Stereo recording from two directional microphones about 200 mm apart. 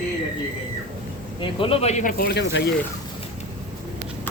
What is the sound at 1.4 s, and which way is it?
Speech, 25° left (ahead or behind).